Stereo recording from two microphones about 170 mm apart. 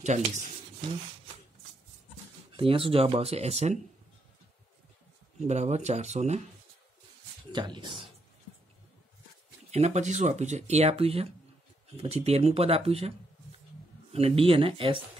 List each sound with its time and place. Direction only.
0.0 s speech: 45° right (ahead or behind)
2.5 s speech: 30° right (ahead or behind)
5.5 s speech: 40° right (ahead or behind)
7.5 s speech: 25° right (ahead or behind)
9.7 s speech: 40° right (ahead or behind)
14.1 s speech: 35° right (ahead or behind)